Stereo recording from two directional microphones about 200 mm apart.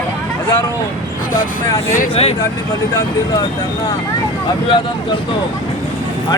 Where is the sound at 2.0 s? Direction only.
30° left (ahead or behind).